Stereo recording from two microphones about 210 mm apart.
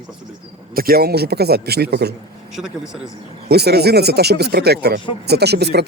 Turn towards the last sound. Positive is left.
turn(degrees=-50)  # may be behind; listen again after turning